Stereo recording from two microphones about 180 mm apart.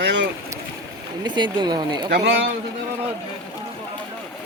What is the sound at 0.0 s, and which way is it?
Boat, 75° right (ahead or behind).